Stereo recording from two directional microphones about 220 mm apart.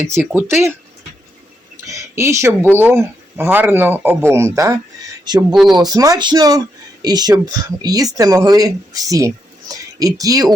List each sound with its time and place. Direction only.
0.0 s speech: 10° right (ahead or behind)
1.9 s speech: 15° right (ahead or behind)